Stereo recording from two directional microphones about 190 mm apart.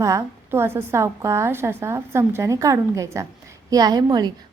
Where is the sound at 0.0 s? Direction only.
15° right (ahead or behind).